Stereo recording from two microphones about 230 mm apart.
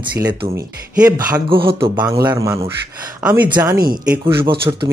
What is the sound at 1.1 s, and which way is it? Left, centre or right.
Speech, centre.